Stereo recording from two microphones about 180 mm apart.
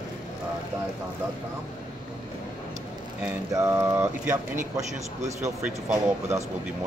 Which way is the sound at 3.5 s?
15° right (ahead or behind).